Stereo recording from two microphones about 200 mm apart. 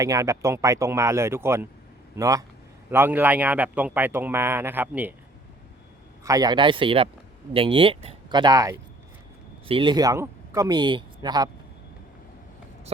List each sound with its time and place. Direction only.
0.0 s speech: 15° right (ahead or behind)
6.2 s speech: 20° right (ahead or behind)